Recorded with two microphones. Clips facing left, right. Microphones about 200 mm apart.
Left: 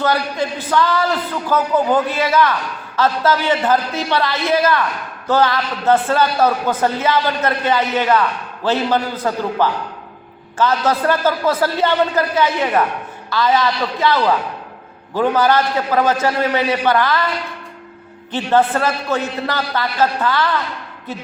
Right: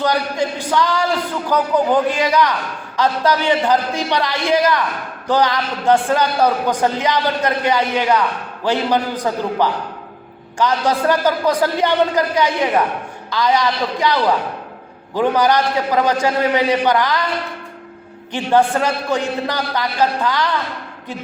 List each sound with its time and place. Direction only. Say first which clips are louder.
0.0 s a man's voice: even; 15° right (ahead or behind)
18.3 s a man's voice: even; 15° right (ahead or behind)